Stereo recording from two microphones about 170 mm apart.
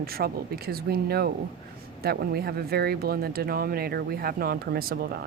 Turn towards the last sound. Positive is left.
turn(degrees=-65)  # may be behind; listen again after turning